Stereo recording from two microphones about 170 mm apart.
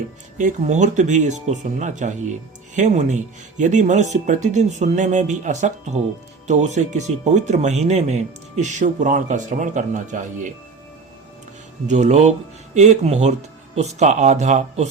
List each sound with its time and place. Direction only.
0.3 s speech: 45° right (ahead or behind)
11.9 s speech: 45° right (ahead or behind)